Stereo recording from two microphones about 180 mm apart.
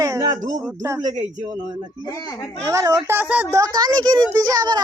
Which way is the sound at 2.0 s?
20° left (ahead or behind).